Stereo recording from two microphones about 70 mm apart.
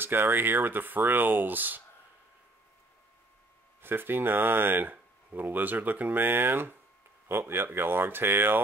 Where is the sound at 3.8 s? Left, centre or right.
Right.